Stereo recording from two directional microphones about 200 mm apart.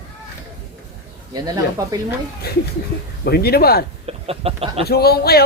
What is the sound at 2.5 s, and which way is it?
A man's voice, 50° left (ahead or behind).